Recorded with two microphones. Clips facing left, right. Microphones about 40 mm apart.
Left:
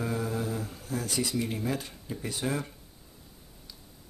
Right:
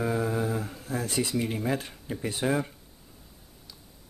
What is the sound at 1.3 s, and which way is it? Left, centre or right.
Speech, centre.